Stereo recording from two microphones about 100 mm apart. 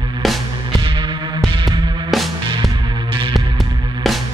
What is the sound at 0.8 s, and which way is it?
Music, 55° right (ahead or behind).